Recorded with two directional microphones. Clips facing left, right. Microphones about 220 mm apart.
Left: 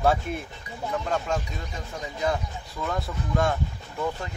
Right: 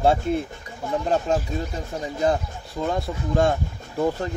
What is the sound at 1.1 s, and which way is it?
Speech, 30° right (ahead or behind).